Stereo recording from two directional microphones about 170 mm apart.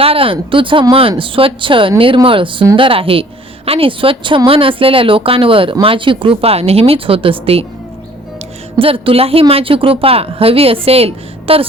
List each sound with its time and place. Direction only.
0.0 s a woman's voice: 35° right (ahead or behind)
8.8 s a woman's voice: 35° right (ahead or behind)